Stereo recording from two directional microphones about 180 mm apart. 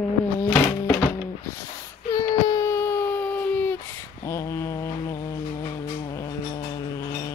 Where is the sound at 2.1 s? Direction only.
20° left (ahead or behind).